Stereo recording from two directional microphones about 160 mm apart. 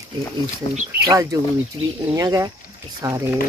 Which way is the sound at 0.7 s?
40° left (ahead or behind).